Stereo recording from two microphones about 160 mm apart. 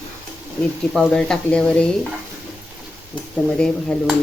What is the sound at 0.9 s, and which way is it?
Speech, 5° left (ahead or behind).